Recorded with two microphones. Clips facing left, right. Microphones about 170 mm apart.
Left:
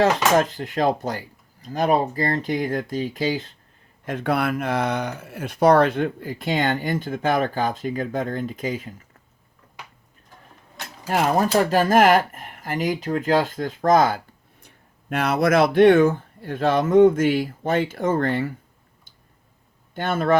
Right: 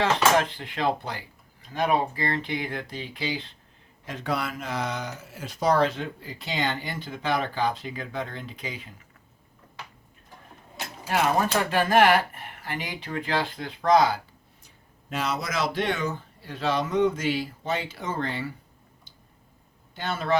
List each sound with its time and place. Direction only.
0.0 s speech: 45° left (ahead or behind)
11.1 s speech: 40° left (ahead or behind)
15.1 s speech: 60° left (ahead or behind)
19.9 s speech: 50° left (ahead or behind)